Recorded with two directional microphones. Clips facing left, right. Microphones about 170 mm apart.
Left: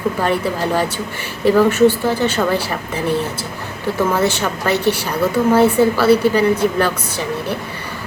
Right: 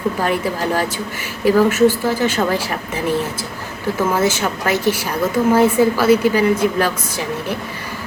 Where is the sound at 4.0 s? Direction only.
10° right (ahead or behind).